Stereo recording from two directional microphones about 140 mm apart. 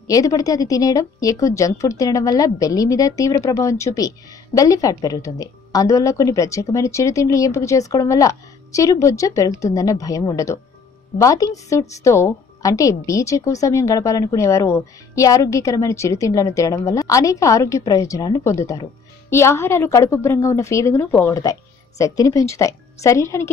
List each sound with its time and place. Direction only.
0.0 s a woman's voice: 25° left (ahead or behind)